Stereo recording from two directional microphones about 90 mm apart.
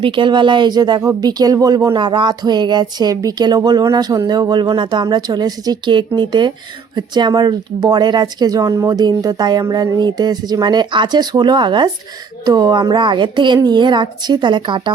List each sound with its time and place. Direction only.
0.0 s a woman's voice: 65° right (ahead or behind)
12.9 s a woman's voice: 60° right (ahead or behind)